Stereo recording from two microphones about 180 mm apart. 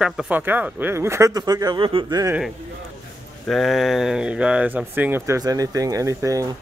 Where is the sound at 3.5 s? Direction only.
Centre (ahead or behind); by 6.6 s 20° right (ahead or behind).